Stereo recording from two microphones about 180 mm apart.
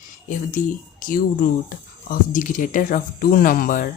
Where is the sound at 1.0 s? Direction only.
50° left (ahead or behind).